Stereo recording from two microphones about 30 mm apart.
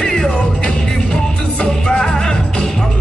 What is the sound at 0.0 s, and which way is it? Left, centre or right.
Music, left.